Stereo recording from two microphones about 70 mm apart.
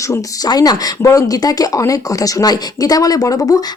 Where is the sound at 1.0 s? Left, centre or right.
Left.